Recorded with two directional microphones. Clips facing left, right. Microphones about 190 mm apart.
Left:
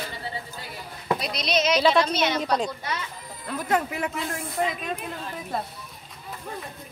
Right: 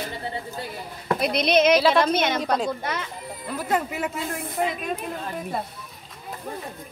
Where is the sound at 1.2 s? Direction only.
55° right (ahead or behind).